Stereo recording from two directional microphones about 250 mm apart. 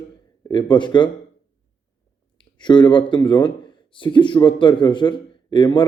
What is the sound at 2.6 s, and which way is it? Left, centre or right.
A man's voice, centre.